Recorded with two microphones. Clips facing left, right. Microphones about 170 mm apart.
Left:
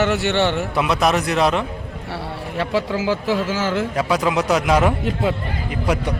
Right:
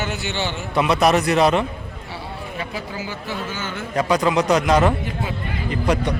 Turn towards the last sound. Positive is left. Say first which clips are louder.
# right 1 dB
turn(degrees=5)  # may be behind; listen again after turning